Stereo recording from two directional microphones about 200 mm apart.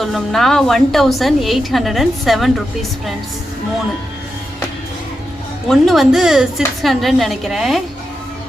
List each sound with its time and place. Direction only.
0.0 s a woman's voice: centre (ahead or behind)
5.6 s a woman's voice: centre (ahead or behind)